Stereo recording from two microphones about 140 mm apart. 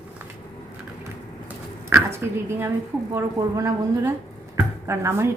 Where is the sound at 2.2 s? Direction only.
15° right (ahead or behind).